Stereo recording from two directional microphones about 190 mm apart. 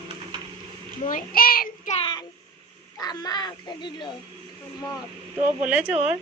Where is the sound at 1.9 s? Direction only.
25° left (ahead or behind).